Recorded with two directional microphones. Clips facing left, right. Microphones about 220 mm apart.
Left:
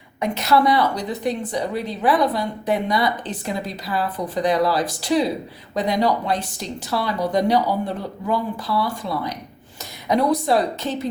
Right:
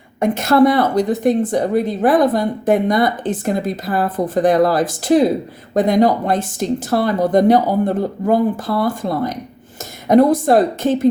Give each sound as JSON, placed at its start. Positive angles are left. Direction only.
{"t": 0.2, "sound": "a woman's voice", "side_deg": -50}